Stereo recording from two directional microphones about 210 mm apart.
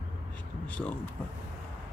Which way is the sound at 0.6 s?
5° left (ahead or behind).